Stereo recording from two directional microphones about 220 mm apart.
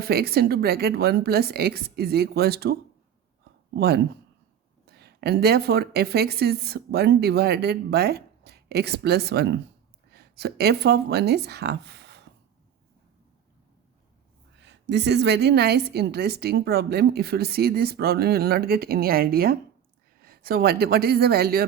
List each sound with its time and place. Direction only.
0.0 s a woman's voice: 45° right (ahead or behind)
3.8 s a woman's voice: 45° right (ahead or behind)
14.6 s a woman's voice: 50° right (ahead or behind)